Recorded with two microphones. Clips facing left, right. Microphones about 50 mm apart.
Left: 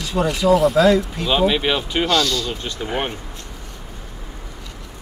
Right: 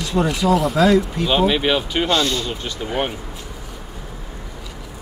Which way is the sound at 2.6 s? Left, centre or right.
Centre.